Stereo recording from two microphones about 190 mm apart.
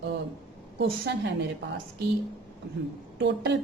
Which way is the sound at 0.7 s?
70° right (ahead or behind).